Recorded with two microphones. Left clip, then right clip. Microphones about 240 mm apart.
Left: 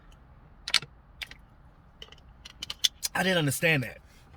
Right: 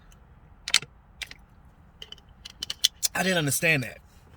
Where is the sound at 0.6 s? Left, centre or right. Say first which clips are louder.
Right 2 dB; centre.